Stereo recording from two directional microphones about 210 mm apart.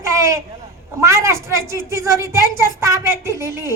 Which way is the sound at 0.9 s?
15° right (ahead or behind).